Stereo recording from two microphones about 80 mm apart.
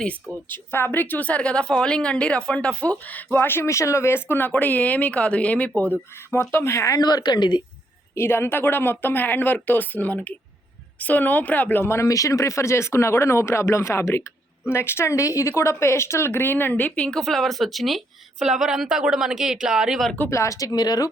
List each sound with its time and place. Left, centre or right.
0.5 s a woman's voice: left
5.9 s speech: left
7.0 s speech: left
8.1 s speech: left; by 20.1 s centre
20.3 s speech: left